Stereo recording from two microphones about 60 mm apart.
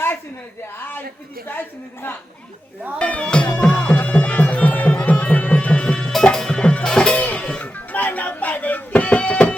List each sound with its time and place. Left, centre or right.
0.8 s a sound: left
1.5 s a woman's voice: left
3.0 s speech: left
3.6 s music: centre
6.1 s music: centre
7.2 s music: left
7.4 s music: centre
7.9 s music: left